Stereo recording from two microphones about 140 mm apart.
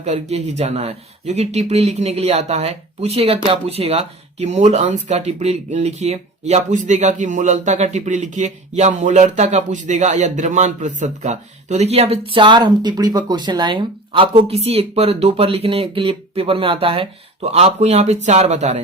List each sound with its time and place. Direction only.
0.0 s speech: 50° right (ahead or behind)